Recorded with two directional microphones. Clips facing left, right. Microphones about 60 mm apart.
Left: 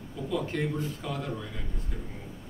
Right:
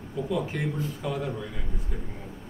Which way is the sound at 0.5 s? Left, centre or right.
Centre.